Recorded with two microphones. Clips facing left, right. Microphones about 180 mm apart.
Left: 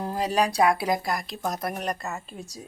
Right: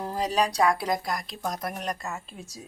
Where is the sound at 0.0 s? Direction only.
5° left (ahead or behind).